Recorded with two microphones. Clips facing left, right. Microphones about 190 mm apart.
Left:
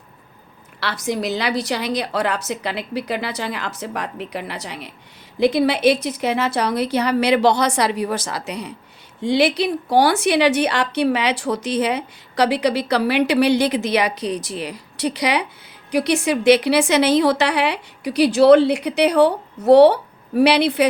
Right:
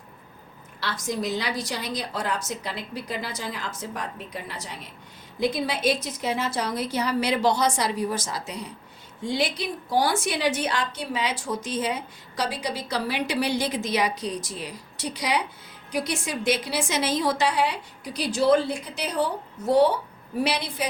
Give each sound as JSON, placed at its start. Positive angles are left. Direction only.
{"t": 0.8, "sound": "a woman's voice", "side_deg": 70}